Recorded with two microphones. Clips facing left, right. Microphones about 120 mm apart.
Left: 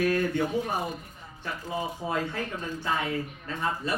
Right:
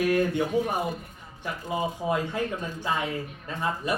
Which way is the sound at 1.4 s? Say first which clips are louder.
Right 3 dB; 15° right (ahead or behind).